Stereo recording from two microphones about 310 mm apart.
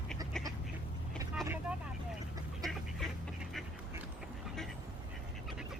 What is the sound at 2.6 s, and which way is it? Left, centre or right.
Duck, centre.